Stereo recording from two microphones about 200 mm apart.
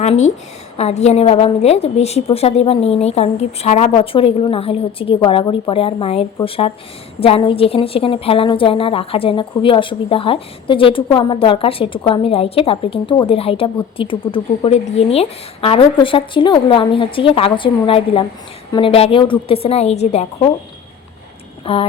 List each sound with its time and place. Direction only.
0.8 s a woman's voice: 35° left (ahead or behind)
21.7 s a woman's voice: 30° left (ahead or behind)